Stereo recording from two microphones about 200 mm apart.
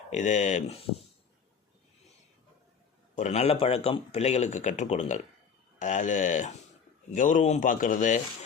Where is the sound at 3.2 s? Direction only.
35° left (ahead or behind).